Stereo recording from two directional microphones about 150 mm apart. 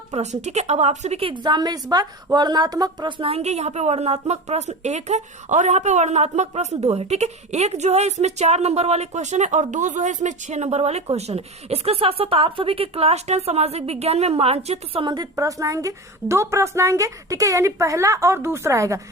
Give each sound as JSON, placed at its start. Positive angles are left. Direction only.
{"t": 0.1, "sound": "a woman's voice", "side_deg": -50}
{"t": 15.1, "sound": "a woman's voice", "side_deg": -25}